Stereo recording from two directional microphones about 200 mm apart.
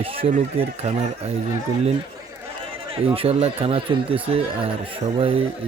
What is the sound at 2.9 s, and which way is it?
Speech, 25° right (ahead or behind).